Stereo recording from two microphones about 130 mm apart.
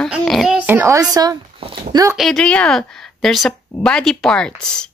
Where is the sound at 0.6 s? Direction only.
20° right (ahead or behind).